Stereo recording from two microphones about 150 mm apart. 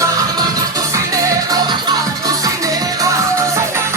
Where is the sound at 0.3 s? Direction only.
25° right (ahead or behind).